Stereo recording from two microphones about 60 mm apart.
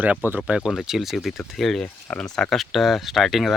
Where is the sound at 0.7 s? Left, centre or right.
Centre.